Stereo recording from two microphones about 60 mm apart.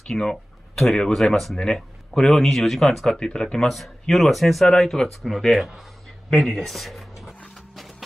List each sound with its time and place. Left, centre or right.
0.0 s speech: centre
6.4 s writing: centre